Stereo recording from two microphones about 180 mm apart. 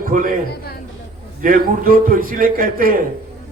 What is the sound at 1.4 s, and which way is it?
A man's voice, 50° right (ahead or behind).